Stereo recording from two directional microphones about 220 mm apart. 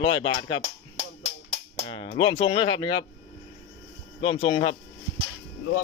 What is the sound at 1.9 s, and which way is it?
Speech, 25° left (ahead or behind).